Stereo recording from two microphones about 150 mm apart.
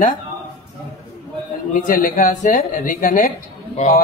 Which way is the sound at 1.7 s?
65° left (ahead or behind).